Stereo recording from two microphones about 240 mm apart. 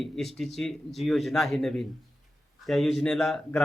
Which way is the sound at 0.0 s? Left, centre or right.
Centre.